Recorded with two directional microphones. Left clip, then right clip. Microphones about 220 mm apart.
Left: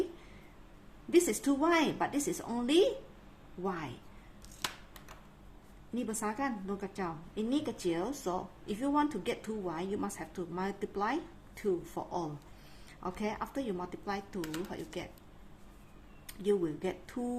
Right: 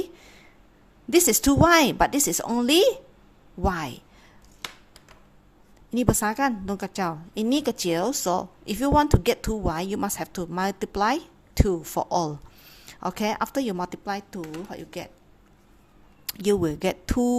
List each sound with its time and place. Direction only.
1.1 s a woman's voice: 45° right (ahead or behind)
5.9 s a woman's voice: 45° right (ahead or behind)
16.2 s a woman's voice: 50° right (ahead or behind)